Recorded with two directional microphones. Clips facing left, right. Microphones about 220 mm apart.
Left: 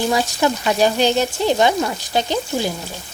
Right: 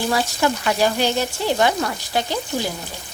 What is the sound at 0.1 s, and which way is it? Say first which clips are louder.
Speech: left 2 dB; 20° left (ahead or behind).